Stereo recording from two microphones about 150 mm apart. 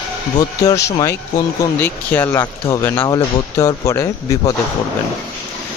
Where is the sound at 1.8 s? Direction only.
15° left (ahead or behind).